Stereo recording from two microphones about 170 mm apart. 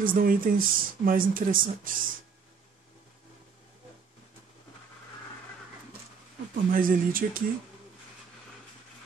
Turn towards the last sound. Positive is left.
turn(degrees=-55)  # may be behind; listen again after turning